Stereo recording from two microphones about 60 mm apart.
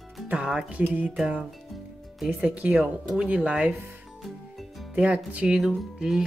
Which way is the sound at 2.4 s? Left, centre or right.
Centre.